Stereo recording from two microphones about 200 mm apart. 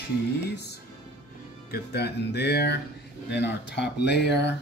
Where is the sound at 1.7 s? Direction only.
55° left (ahead or behind).